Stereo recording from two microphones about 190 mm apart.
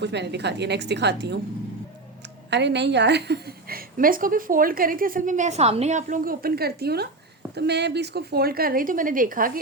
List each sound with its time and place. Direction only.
0.0 s a woman's voice: 65° right (ahead or behind)
2.5 s a woman's voice: 65° right (ahead or behind); by 9.5 s 45° right (ahead or behind)